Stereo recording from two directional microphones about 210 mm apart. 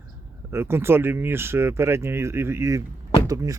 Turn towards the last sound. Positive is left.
turn(degrees=-15)  # may be behind; listen again after turning